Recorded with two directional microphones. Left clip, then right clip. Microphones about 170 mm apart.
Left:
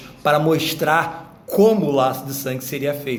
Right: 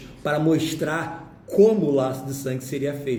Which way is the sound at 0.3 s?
20° right (ahead or behind).